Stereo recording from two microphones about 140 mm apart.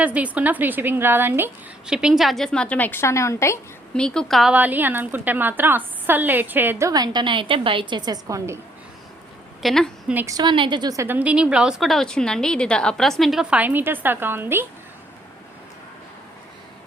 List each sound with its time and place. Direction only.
0.0 s a woman's voice: 10° right (ahead or behind)
1.9 s a woman's voice: 5° right (ahead or behind); by 3.6 s 20° left (ahead or behind)
3.9 s a woman's voice: 5° left (ahead or behind)
4.5 s a woman's voice: 10° right (ahead or behind)
9.6 s a woman's voice: 5° left (ahead or behind)
10.2 s a woman's voice: 30° right (ahead or behind)